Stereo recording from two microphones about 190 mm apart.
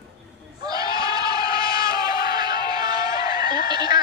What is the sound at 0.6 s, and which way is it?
Battle cry, 20° right (ahead or behind).